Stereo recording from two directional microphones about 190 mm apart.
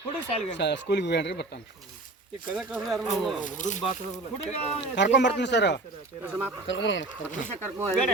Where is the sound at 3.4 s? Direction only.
40° left (ahead or behind).